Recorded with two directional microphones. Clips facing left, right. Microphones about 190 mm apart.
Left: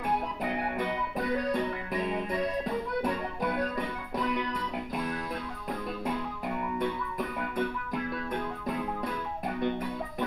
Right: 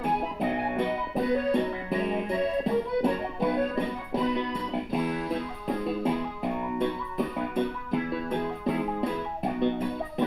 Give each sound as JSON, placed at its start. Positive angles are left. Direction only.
{"t": 0.0, "sound": "music", "side_deg": -25}